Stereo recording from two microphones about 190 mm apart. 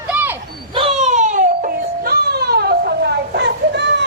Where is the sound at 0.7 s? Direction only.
30° right (ahead or behind); by 2.9 s 55° right (ahead or behind).